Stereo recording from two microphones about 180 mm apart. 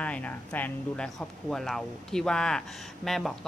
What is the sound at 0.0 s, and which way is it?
A woman's voice, 5° left (ahead or behind).